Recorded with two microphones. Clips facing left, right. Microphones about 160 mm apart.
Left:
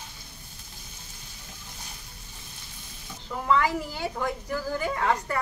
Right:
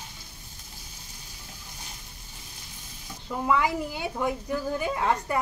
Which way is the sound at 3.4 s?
15° right (ahead or behind).